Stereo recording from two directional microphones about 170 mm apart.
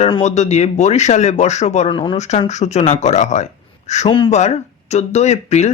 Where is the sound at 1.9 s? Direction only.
30° left (ahead or behind).